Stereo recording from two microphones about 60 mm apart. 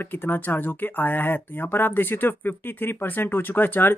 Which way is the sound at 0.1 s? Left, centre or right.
Left.